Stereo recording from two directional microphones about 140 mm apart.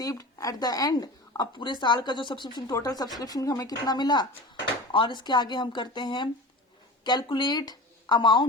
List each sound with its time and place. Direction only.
0.0 s a woman's voice: 25° left (ahead or behind)